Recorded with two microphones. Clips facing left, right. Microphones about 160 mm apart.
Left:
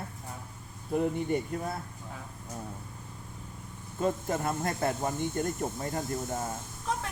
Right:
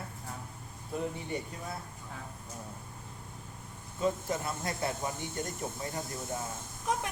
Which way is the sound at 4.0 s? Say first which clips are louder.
Left 2 dB; 50° left (ahead or behind).